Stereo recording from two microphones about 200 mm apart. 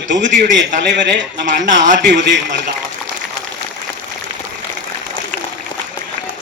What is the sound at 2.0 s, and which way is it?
Speech, 65° right (ahead or behind).